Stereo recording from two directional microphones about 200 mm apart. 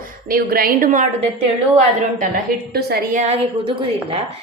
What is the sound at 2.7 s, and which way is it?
Speech, 50° right (ahead or behind).